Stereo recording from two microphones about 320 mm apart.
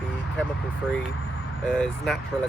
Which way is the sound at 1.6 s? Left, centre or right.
Centre.